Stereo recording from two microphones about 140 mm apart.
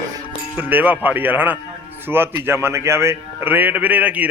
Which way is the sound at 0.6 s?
10° right (ahead or behind).